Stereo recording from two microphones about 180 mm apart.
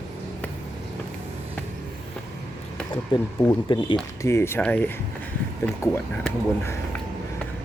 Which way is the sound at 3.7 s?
25° left (ahead or behind).